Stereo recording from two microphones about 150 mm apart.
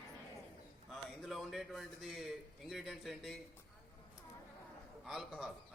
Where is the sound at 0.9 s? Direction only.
Centre (ahead or behind).